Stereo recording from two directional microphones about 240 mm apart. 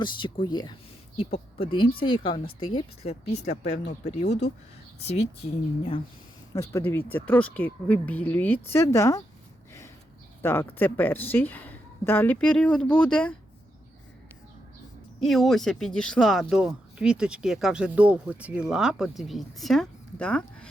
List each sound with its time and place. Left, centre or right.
0.0 s speech: centre
6.5 s a woman's voice: centre
10.4 s a woman's voice: centre
15.2 s speech: centre